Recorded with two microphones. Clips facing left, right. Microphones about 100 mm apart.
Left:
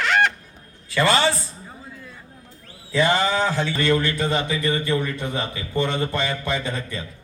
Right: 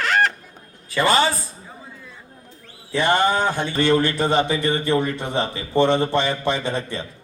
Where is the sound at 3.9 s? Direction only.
25° right (ahead or behind).